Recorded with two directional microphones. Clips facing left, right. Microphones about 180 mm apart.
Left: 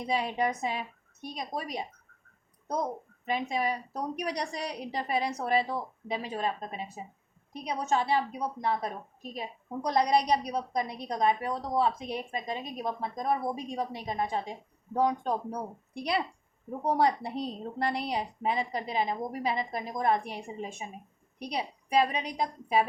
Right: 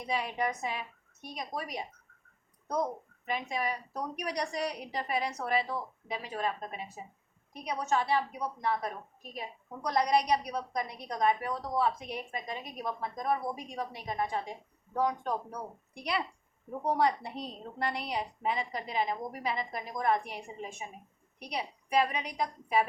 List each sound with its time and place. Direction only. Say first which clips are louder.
0.0 s a woman's voice: left 3 dB; 30° left (ahead or behind)
3.2 s a woman's voice: left 4 dB; 25° left (ahead or behind)